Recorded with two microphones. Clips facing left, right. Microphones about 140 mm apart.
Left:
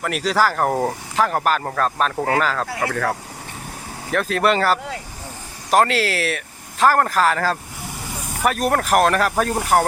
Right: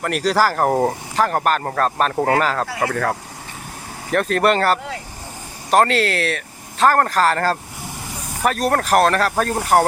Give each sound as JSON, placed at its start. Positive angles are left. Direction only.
{"t": 0.0, "sound": "speech", "side_deg": 0}
{"t": 2.1, "sound": "speech", "side_deg": -25}
{"t": 2.4, "sound": "speech", "side_deg": 0}
{"t": 9.6, "sound": "speech", "side_deg": 0}